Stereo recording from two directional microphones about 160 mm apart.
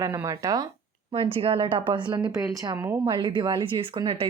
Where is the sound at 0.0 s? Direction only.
20° right (ahead or behind).